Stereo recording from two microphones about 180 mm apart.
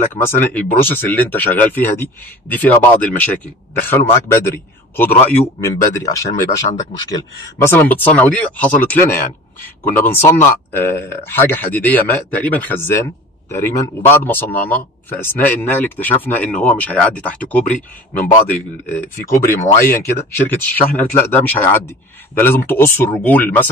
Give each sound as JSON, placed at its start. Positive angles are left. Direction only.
{"t": 0.1, "sound": "a man's voice", "side_deg": 10}
{"t": 7.5, "sound": "a man's voice", "side_deg": 10}